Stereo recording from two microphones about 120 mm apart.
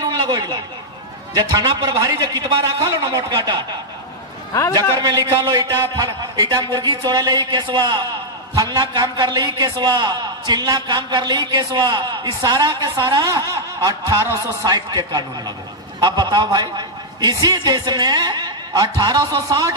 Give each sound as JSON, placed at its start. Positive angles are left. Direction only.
{"t": 0.0, "sound": "a sound", "side_deg": -35}
{"t": 1.3, "sound": "a man's voice", "side_deg": -35}
{"t": 5.2, "sound": "a man's voice", "side_deg": -35}